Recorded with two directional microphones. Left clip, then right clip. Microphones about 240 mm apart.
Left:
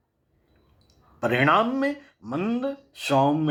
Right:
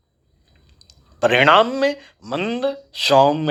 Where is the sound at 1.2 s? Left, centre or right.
Right.